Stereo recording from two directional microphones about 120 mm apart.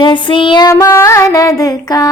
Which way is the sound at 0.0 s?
40° left (ahead or behind).